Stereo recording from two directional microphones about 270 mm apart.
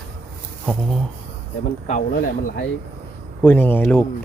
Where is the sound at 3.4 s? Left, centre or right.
Centre.